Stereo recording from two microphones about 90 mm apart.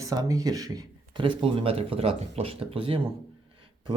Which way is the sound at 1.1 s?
70° right (ahead or behind).